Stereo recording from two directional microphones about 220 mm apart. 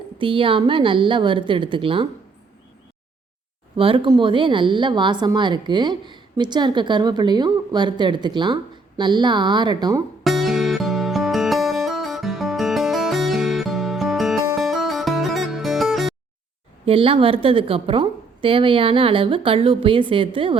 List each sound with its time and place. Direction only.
0.2 s a woman's voice: 25° right (ahead or behind)
3.8 s a woman's voice: 25° right (ahead or behind)
10.2 s music: centre (ahead or behind)
16.8 s a woman's voice: 25° right (ahead or behind)